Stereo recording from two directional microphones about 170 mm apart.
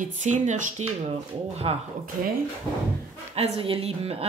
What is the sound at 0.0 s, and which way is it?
Speech, 45° right (ahead or behind).